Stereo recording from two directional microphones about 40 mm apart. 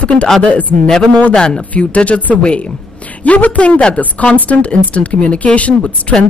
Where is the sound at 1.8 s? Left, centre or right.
Left.